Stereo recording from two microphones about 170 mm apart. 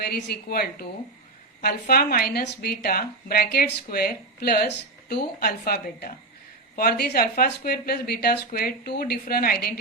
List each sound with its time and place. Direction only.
0.1 s a woman's voice: 65° left (ahead or behind)